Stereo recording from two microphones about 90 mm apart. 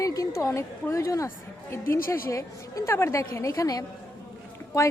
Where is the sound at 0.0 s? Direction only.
40° left (ahead or behind).